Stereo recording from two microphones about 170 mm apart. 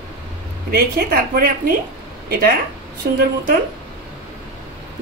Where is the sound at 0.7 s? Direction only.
65° right (ahead or behind).